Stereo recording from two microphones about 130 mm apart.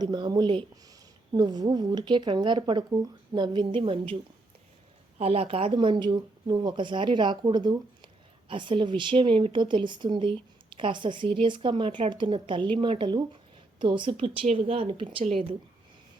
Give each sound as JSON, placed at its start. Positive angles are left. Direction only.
{"t": 0.0, "sound": "speech", "side_deg": -30}